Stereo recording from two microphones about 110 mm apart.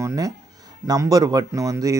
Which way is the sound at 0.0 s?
30° right (ahead or behind).